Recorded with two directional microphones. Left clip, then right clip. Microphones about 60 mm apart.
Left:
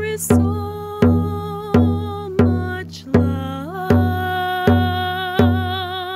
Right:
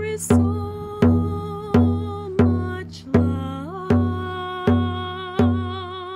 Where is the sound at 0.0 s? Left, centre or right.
Right.